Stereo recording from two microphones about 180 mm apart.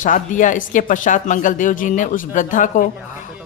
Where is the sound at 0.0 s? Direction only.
45° left (ahead or behind).